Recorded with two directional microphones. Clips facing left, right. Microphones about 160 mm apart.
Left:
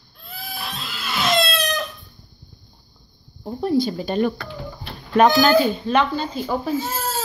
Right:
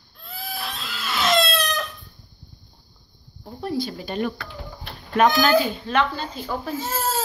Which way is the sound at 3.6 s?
25° left (ahead or behind).